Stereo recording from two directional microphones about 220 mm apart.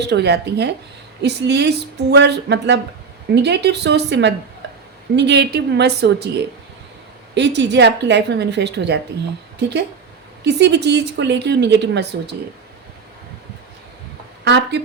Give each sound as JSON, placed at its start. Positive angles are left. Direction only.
{"t": 0.0, "sound": "a woman's voice", "side_deg": -50}
{"t": 7.3, "sound": "a woman's voice", "side_deg": -50}
{"t": 14.4, "sound": "a woman's voice", "side_deg": -50}